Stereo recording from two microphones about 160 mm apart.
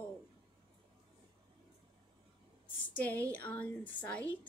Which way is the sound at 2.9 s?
10° left (ahead or behind).